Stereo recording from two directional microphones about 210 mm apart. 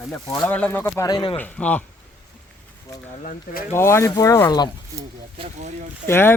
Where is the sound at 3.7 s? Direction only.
10° left (ahead or behind).